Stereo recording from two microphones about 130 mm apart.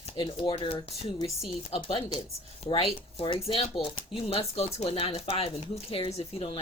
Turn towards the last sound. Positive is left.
turn(degrees=45)  # may be behind; listen again after turning